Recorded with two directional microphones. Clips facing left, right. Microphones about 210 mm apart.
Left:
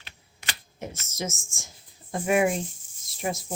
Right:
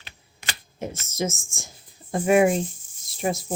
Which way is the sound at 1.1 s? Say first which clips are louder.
Right 7 dB; 30° right (ahead or behind).